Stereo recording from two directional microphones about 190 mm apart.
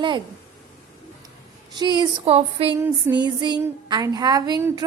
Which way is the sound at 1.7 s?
25° right (ahead or behind).